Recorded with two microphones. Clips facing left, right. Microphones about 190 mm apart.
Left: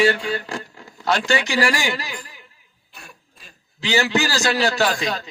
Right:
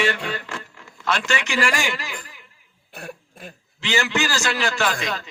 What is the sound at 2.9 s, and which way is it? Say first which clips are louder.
Cough: right 10 dB; 55° right (ahead or behind).